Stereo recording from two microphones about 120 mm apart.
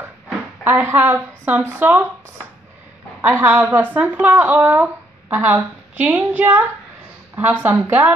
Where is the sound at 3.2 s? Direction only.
15° right (ahead or behind).